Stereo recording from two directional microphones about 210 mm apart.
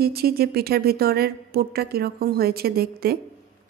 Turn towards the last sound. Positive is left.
turn(degrees=-45)  # may be behind; listen again after turning